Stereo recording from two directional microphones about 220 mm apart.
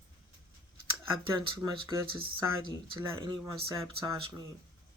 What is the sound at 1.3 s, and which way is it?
Speech, 15° right (ahead or behind).